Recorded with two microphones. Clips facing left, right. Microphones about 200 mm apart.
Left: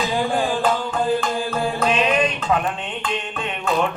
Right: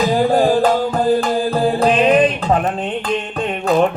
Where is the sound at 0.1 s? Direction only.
40° right (ahead or behind).